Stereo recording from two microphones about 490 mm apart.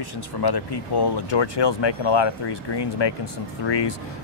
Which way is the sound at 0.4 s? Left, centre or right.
Left.